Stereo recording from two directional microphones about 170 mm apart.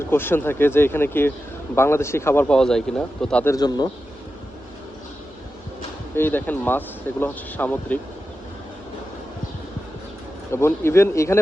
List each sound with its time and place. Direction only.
0.1 s speech: 15° left (ahead or behind)
3.4 s speech: 20° left (ahead or behind)
6.1 s speech: 10° left (ahead or behind)
10.5 s speech: 15° left (ahead or behind)